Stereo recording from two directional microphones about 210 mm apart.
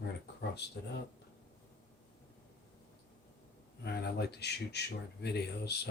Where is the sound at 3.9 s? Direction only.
50° left (ahead or behind).